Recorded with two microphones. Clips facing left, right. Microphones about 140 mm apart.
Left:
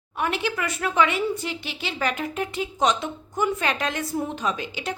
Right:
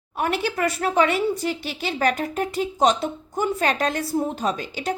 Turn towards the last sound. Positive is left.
turn(degrees=-40)  # may be behind; listen again after turning